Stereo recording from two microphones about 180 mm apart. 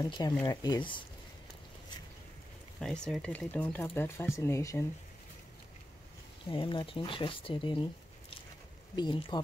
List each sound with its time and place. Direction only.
0.0 s speech: 20° left (ahead or behind)
2.8 s speech: 5° left (ahead or behind)
6.5 s speech: 25° left (ahead or behind)
8.9 s speech: 25° left (ahead or behind)